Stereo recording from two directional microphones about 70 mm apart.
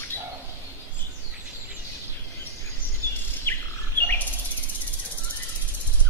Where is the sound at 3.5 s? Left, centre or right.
Left.